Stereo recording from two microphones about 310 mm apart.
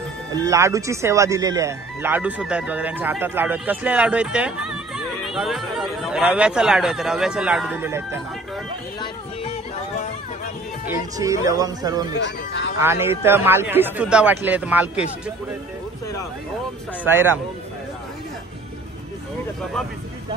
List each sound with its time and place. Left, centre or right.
0.3 s speech: centre
10.9 s a man's voice: centre
12.2 s speech: left
12.8 s a man's voice: centre
17.0 s a man's voice: centre